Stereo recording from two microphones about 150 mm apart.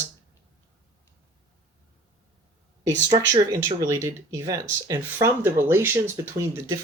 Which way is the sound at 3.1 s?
35° right (ahead or behind).